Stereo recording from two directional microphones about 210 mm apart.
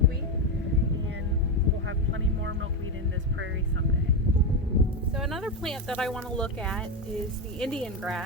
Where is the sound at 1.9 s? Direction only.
60° right (ahead or behind).